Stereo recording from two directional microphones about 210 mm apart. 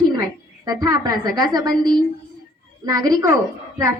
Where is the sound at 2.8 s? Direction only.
15° right (ahead or behind).